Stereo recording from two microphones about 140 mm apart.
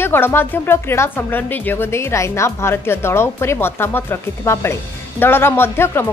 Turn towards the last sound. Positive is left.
turn(degrees=15)  # may be behind; listen again after turning